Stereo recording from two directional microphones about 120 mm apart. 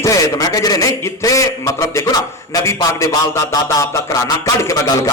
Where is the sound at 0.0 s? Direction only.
30° left (ahead or behind).